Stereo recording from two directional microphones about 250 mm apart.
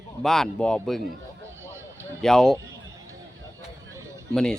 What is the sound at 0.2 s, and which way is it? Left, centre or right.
Speech, centre.